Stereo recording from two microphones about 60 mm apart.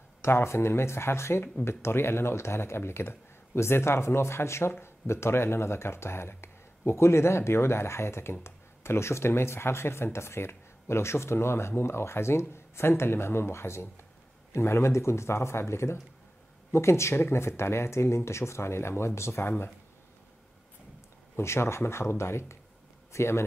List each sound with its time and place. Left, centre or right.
0.2 s speech: left
21.4 s speech: left